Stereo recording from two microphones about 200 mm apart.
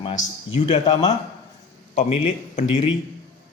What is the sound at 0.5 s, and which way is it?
A man's voice, 30° left (ahead or behind).